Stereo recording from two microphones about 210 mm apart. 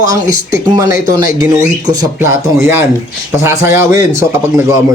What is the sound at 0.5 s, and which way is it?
Speech, 15° right (ahead or behind).